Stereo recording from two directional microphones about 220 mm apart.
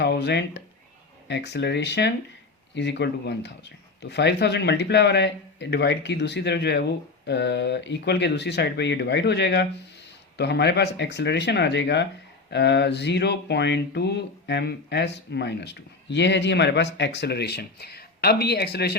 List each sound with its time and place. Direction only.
0.0 s speech: 50° left (ahead or behind)